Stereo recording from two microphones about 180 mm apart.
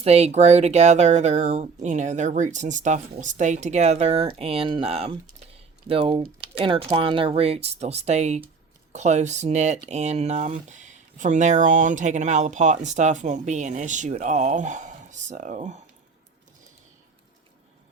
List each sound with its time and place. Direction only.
0.0 s speech: 35° right (ahead or behind)